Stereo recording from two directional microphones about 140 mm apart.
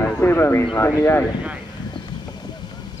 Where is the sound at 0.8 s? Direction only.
20° left (ahead or behind).